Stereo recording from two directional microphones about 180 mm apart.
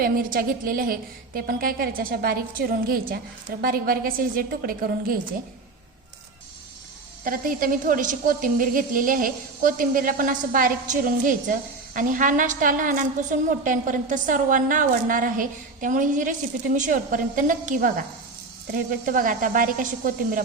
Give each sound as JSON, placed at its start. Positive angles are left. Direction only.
{"t": 0.0, "sound": "a woman's voice", "side_deg": -55}
{"t": 7.3, "sound": "a woman's voice", "side_deg": -50}